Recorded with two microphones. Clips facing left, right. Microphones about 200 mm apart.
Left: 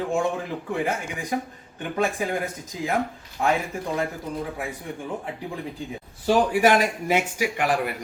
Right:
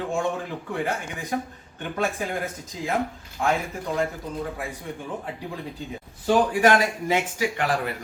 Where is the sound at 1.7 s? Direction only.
15° left (ahead or behind).